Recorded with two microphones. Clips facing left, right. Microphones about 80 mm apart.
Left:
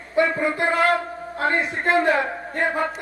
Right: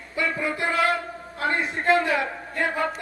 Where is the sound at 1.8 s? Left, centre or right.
Left.